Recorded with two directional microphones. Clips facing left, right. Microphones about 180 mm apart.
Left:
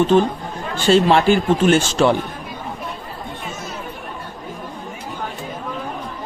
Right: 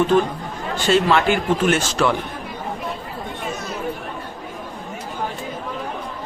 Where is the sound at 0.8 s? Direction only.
30° left (ahead or behind).